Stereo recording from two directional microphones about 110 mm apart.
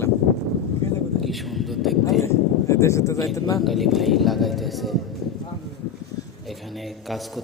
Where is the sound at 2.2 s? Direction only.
25° left (ahead or behind).